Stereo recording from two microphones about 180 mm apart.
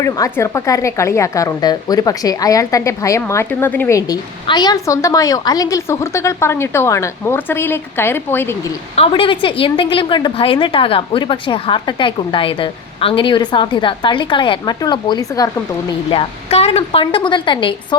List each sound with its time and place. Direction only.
0.0 s a woman's voice: 15° left (ahead or behind)
9.0 s a woman's voice: 30° left (ahead or behind)
15.9 s a woman's voice: 30° left (ahead or behind)